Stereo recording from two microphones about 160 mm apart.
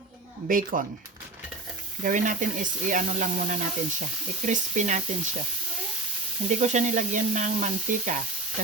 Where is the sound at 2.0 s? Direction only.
55° right (ahead or behind).